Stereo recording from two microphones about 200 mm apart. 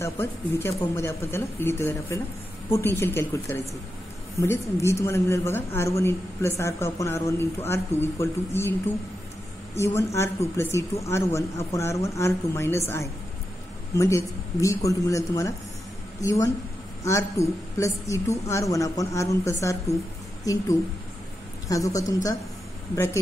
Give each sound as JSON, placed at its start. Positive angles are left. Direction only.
{"t": 0.0, "sound": "a woman's voice", "side_deg": 10}
{"t": 9.9, "sound": "a woman's voice", "side_deg": 15}
{"t": 21.6, "sound": "a woman's voice", "side_deg": 15}